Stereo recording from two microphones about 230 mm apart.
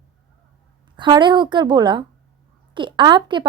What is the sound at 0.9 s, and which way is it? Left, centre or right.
A woman's voice, centre.